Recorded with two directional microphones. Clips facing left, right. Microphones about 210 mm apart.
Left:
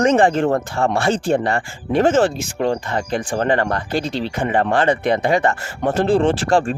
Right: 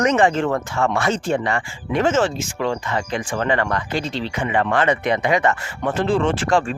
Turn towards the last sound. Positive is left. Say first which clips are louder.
# left 2 dB
turn(degrees=35)  # may be behind; listen again after turning